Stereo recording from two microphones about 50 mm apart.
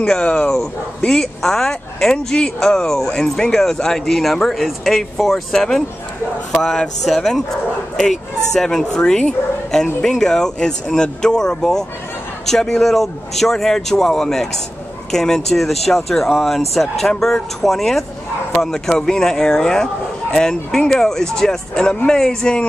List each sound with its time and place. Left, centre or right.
0.0 s speech: centre
7.1 s speech: centre
8.5 s speech: centre